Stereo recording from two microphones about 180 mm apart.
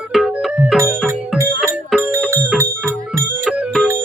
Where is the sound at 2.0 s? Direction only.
15° right (ahead or behind).